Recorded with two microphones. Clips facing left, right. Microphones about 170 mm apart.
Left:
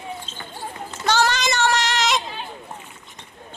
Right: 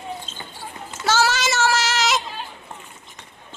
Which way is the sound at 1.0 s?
5° right (ahead or behind).